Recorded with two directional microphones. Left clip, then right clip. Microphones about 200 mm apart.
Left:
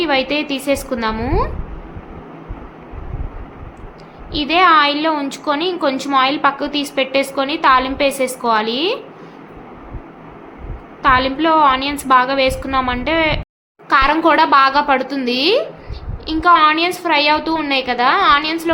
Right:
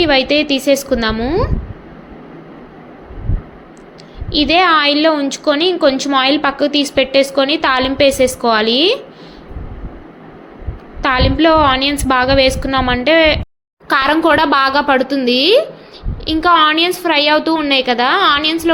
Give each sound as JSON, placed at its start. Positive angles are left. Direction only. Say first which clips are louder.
{"t": 0.0, "sound": "a woman's voice", "louder": "right 5 dB", "side_deg": -15}
{"t": 1.2, "sound": "speech", "louder": "right 3 dB", "side_deg": 0}
{"t": 4.3, "sound": "a woman's voice", "louder": "right 1 dB", "side_deg": -15}
{"t": 11.0, "sound": "a woman's voice", "louder": "right 1 dB", "side_deg": -20}